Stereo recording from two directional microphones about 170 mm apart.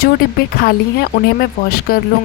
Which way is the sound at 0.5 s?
65° left (ahead or behind).